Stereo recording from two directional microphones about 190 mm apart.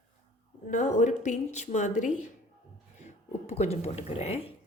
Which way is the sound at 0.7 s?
40° left (ahead or behind).